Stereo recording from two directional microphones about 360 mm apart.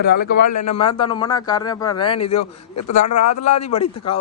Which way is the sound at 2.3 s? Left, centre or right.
Left.